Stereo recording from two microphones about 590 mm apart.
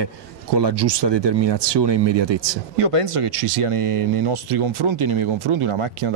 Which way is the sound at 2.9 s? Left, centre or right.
Right.